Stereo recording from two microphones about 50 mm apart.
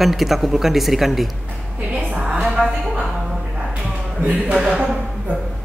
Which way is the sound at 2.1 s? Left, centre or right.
Right.